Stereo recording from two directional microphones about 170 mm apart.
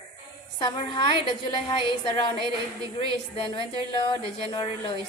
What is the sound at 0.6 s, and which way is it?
A woman's voice, 25° left (ahead or behind).